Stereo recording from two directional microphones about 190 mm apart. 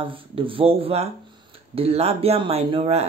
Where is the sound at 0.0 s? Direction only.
25° right (ahead or behind).